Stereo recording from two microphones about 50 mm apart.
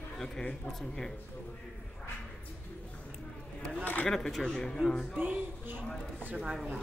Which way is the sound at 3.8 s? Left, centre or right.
Left.